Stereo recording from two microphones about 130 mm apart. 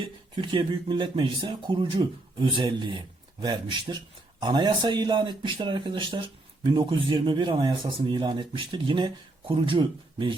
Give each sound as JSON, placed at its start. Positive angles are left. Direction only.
{"t": 0.0, "sound": "speech", "side_deg": -35}